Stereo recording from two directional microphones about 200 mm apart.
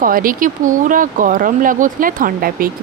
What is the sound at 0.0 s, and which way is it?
Speech, 45° right (ahead or behind).